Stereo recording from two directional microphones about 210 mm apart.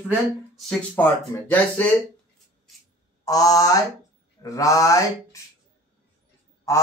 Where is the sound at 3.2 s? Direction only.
15° left (ahead or behind).